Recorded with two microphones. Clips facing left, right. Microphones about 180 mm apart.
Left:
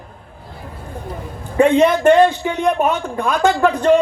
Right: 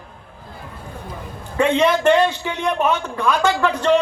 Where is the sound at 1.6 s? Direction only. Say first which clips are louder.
Left 4 dB; 50° left (ahead or behind).